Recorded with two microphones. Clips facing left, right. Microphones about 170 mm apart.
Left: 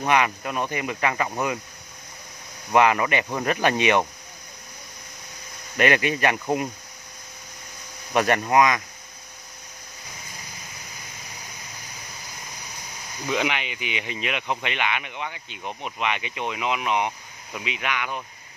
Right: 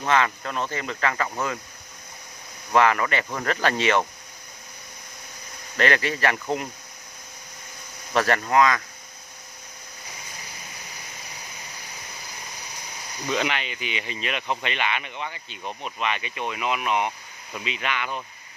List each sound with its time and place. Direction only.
0.0 s speech: 15° left (ahead or behind)
2.7 s speech: 20° left (ahead or behind)
5.8 s speech: 15° left (ahead or behind)
8.1 s speech: 20° left (ahead or behind)
13.3 s speech: 15° left (ahead or behind)